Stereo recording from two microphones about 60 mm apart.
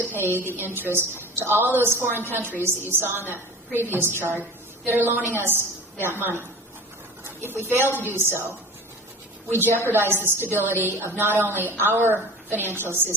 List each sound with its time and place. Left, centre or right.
0.0 s a woman's voice: right
2.0 s a woman's voice: left
2.3 s a woman's voice: right